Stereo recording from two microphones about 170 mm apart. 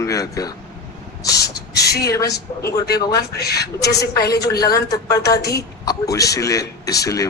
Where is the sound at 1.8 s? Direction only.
70° left (ahead or behind).